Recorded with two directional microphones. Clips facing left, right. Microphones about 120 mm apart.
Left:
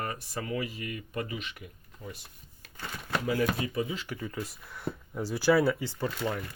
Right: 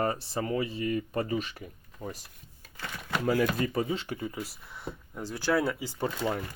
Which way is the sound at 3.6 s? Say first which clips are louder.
Right 3 dB; 40° right (ahead or behind).